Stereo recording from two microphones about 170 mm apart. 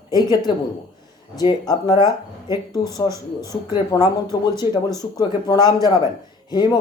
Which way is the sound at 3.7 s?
25° left (ahead or behind).